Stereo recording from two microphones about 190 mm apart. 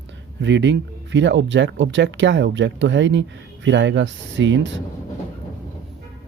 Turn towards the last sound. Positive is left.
turn(degrees=-75)  # may be behind; listen again after turning